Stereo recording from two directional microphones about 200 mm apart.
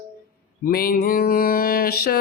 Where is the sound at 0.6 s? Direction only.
50° left (ahead or behind).